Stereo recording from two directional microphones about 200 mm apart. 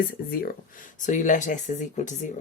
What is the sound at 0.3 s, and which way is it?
Speech, 45° left (ahead or behind).